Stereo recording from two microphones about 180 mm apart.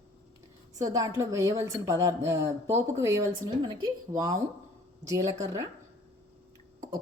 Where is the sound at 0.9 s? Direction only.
20° right (ahead or behind).